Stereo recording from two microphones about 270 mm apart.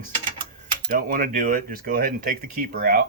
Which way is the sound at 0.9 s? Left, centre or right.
Right.